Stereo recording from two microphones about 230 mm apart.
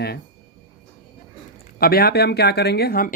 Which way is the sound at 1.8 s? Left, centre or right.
Left.